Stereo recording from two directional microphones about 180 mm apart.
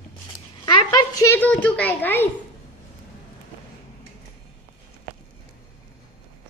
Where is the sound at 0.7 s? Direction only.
20° left (ahead or behind).